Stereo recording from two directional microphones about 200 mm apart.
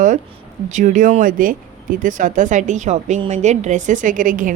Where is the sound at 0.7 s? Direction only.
40° right (ahead or behind).